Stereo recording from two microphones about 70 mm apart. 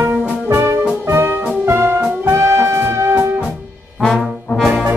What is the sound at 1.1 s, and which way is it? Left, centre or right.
Music, right.